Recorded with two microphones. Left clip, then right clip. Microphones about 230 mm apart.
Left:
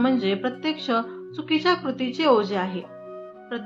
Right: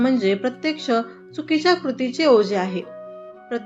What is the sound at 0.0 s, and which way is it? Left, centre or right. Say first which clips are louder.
Speech: right 3 dB; centre.